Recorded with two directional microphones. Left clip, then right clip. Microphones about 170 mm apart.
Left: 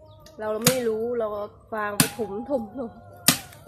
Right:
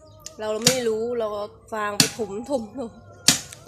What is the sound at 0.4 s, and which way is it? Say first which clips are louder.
Speech: right 2 dB; 15° right (ahead or behind).